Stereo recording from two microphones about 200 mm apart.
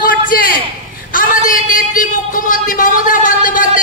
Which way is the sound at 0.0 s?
45° left (ahead or behind).